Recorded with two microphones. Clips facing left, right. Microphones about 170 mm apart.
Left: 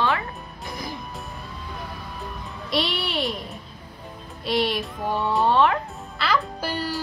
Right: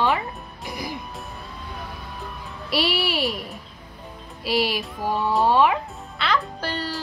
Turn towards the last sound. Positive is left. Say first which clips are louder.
# left 1 dB
turn(degrees=10)  # may be behind; listen again after turning